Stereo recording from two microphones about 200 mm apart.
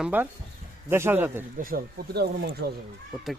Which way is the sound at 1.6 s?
45° right (ahead or behind).